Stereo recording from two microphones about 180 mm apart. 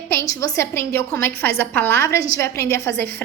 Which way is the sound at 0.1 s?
15° left (ahead or behind).